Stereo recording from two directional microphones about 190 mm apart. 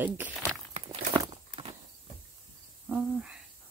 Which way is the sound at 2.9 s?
5° right (ahead or behind).